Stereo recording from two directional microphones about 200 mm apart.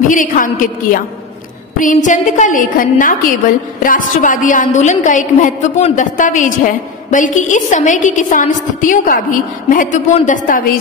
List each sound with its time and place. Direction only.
0.1 s a woman's voice: 40° left (ahead or behind)